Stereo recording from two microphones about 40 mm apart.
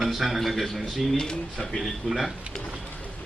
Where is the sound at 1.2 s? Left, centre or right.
Centre.